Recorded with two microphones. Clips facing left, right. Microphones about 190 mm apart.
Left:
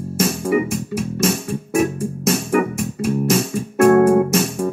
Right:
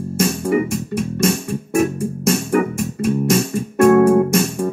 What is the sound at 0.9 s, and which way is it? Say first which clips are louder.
Music: right 2 dB; centre (ahead or behind).